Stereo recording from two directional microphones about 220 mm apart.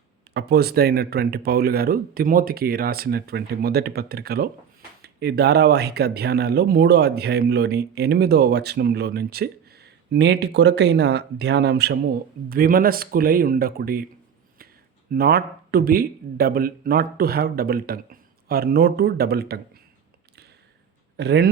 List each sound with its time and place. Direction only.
0.3 s speech: 45° right (ahead or behind)
15.1 s speech: 45° right (ahead or behind)
21.2 s speech: 50° right (ahead or behind)